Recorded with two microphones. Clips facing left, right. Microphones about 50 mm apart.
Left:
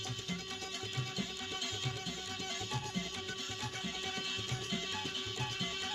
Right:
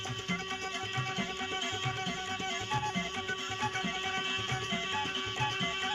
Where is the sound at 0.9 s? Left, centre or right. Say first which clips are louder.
Right 6 dB; right.